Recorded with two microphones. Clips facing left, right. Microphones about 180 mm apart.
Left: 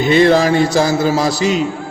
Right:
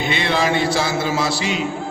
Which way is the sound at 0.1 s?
40° left (ahead or behind).